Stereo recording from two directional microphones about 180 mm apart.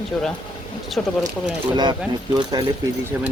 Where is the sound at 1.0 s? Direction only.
5° left (ahead or behind).